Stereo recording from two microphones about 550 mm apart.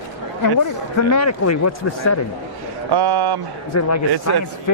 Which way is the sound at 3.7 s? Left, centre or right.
Left.